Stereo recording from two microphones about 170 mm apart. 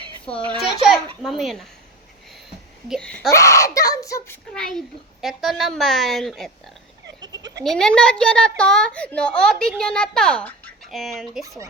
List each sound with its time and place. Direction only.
0.6 s baby laughter: centre (ahead or behind)
2.9 s a child's voice: 5° left (ahead or behind)
3.3 s a child's voice: 20° left (ahead or behind)
4.5 s a child's voice: 5° left (ahead or behind)
7.2 s bleat: 25° right (ahead or behind)
7.6 s a child's voice: 5° left (ahead or behind)